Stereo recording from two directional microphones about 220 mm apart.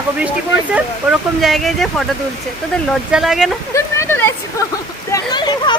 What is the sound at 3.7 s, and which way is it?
Speech, 10° left (ahead or behind).